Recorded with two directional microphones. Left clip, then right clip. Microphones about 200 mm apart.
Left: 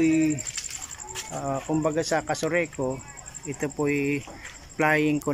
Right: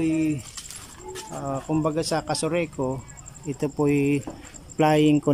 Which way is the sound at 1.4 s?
5° right (ahead or behind).